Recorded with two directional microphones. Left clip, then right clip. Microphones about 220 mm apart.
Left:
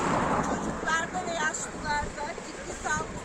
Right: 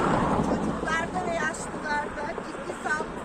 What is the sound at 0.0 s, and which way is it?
Vehicle, 50° left (ahead or behind).